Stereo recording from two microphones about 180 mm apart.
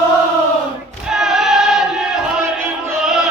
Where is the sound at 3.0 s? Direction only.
Centre (ahead or behind).